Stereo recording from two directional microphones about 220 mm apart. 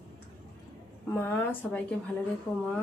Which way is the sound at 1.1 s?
10° left (ahead or behind).